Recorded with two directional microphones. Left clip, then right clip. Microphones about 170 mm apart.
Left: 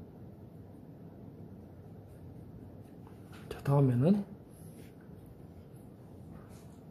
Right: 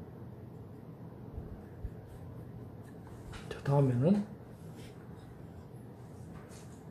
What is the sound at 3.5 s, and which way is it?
Speech, 35° left (ahead or behind).